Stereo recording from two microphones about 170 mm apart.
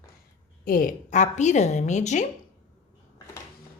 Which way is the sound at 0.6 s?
55° left (ahead or behind).